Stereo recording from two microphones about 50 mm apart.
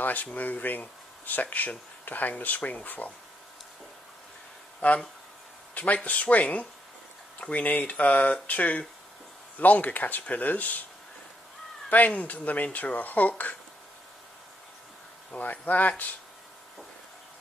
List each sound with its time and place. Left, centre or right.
0.0 s speech: left
4.7 s speech: left
6.0 s speech: left
12.1 s speech: left
15.3 s speech: left